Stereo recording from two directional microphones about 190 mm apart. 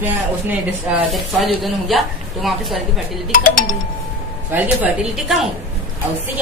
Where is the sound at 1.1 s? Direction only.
Centre (ahead or behind).